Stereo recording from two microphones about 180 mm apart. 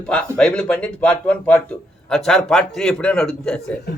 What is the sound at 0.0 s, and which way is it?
Speech, 5° left (ahead or behind).